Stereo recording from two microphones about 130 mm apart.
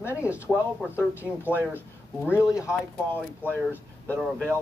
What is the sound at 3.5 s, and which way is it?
Speech, 15° left (ahead or behind).